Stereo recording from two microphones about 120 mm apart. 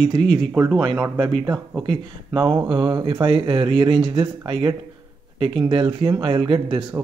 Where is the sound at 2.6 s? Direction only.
40° right (ahead or behind).